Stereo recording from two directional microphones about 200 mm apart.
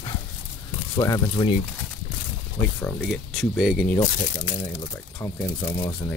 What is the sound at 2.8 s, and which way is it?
Speech, 5° left (ahead or behind).